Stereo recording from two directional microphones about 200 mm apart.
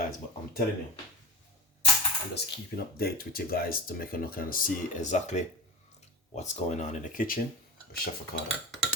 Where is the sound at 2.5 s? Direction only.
50° left (ahead or behind).